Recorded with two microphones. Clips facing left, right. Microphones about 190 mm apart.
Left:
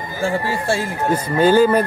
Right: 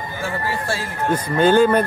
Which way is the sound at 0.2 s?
30° left (ahead or behind).